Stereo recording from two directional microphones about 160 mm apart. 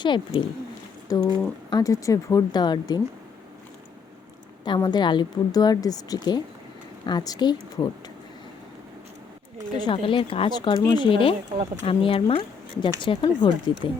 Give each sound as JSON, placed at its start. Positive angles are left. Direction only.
{"t": 0.0, "sound": "speech", "side_deg": 30}
{"t": 4.6, "sound": "speech", "side_deg": 30}
{"t": 9.7, "sound": "speech", "side_deg": 30}